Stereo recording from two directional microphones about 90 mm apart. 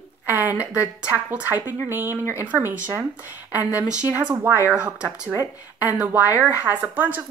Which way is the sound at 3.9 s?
15° right (ahead or behind).